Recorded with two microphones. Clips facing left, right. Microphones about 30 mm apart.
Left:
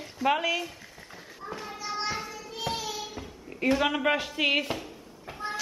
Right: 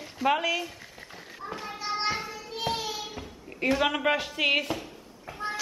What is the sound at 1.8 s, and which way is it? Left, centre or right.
Children playing, right.